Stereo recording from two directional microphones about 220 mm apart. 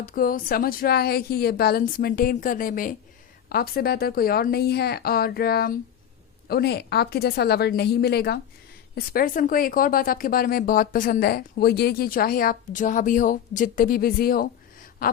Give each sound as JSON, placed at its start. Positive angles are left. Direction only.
{"t": 0.0, "sound": "speech", "side_deg": 40}